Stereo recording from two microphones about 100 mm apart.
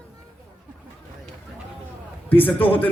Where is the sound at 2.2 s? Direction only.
20° left (ahead or behind).